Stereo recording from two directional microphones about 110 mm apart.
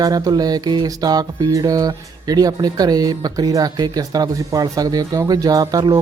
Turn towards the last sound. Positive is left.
turn(degrees=-35)  # may be behind; listen again after turning